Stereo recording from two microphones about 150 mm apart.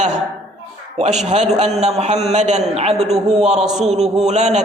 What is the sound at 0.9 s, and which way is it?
A man's voice, 50° right (ahead or behind).